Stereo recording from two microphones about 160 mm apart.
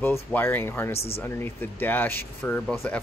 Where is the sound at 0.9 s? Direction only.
40° left (ahead or behind).